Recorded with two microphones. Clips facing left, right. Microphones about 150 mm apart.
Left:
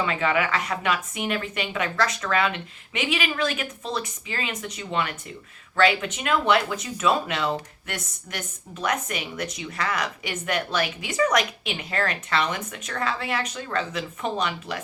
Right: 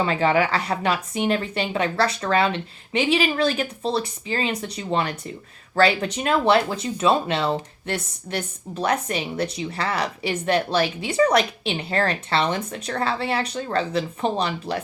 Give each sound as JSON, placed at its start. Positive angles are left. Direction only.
{"t": 0.0, "sound": "speech", "side_deg": -35}